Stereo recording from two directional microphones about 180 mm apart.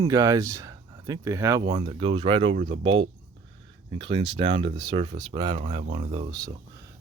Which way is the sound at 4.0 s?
30° right (ahead or behind).